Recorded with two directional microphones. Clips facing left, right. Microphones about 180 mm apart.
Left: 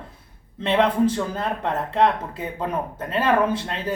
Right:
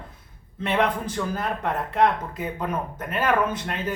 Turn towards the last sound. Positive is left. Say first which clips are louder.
# left 3 dB
turn(degrees=30)  # may be behind; listen again after turning